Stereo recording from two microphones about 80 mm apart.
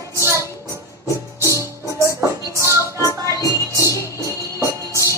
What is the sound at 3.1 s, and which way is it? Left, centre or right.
Music, left.